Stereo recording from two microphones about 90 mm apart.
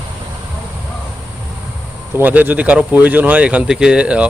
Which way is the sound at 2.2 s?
20° right (ahead or behind).